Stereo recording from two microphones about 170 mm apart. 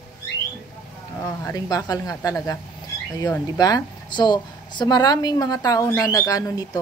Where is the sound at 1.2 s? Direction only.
15° left (ahead or behind).